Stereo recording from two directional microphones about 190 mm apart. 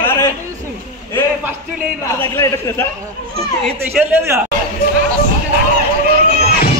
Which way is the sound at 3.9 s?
10° right (ahead or behind).